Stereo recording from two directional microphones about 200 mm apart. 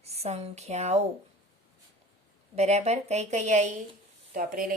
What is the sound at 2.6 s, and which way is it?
Speech, 35° right (ahead or behind).